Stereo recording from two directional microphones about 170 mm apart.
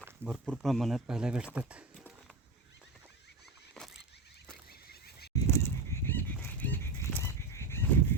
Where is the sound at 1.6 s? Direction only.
10° right (ahead or behind).